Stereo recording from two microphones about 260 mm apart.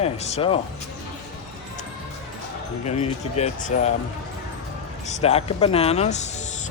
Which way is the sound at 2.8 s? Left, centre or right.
Left.